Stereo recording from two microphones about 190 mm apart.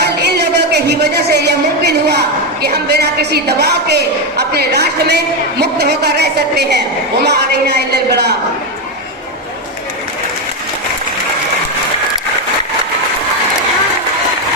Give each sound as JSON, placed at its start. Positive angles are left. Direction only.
{"t": 0.0, "sound": "speech", "side_deg": -60}